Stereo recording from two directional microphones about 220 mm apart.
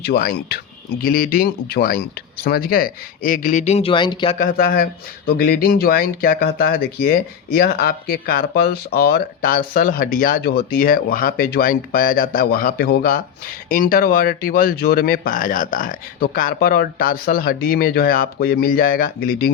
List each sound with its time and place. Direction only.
0.0 s speech: 45° left (ahead or behind); by 4.4 s 20° left (ahead or behind)
4.4 s speech: 40° left (ahead or behind)